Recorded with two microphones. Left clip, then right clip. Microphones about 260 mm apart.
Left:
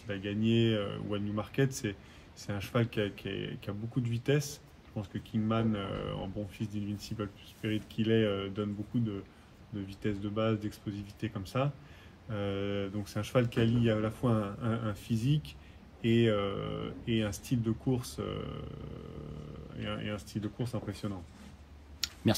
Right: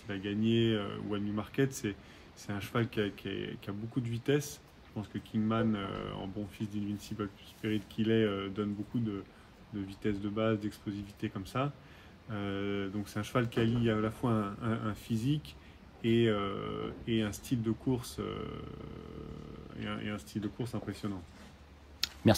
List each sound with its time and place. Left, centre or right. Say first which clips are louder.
0.1 s speech: left 1 dB; centre
19.8 s speech: left 2 dB; centre
22.0 s a sound: right 1 dB; right